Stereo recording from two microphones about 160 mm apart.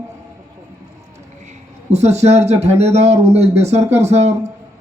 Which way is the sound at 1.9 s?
45° right (ahead or behind).